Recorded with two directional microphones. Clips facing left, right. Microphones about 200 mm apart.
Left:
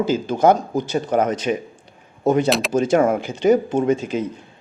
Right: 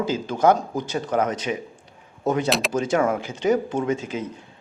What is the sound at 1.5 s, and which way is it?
Speech, 40° left (ahead or behind).